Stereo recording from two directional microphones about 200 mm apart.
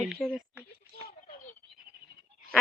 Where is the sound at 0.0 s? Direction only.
Centre (ahead or behind).